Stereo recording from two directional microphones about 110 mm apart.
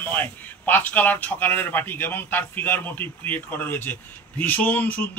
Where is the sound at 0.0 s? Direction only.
15° left (ahead or behind).